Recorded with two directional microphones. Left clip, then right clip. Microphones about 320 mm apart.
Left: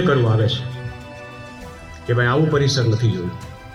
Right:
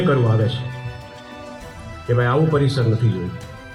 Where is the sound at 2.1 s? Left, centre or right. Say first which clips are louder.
Even; left.